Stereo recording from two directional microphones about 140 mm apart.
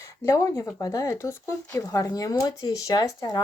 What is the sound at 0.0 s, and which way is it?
Speech, 25° left (ahead or behind).